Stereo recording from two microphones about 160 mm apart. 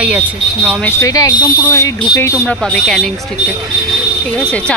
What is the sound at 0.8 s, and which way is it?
Speech, 20° left (ahead or behind).